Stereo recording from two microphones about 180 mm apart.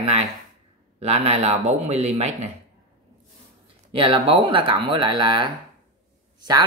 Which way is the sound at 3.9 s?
30° right (ahead or behind).